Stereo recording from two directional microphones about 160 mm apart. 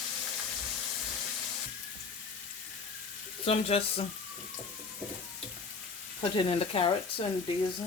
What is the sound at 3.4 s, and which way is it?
Speech, 35° left (ahead or behind).